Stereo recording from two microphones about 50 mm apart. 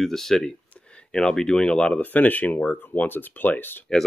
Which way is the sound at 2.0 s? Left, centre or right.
Left.